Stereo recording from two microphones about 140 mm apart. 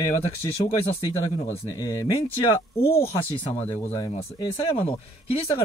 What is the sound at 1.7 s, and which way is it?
Speech, 30° left (ahead or behind).